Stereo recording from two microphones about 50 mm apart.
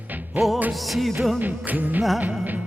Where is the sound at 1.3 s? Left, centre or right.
Right.